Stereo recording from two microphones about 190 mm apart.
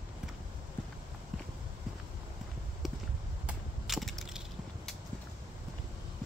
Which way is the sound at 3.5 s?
Centre (ahead or behind).